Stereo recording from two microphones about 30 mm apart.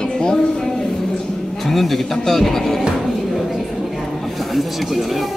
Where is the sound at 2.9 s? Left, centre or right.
Centre.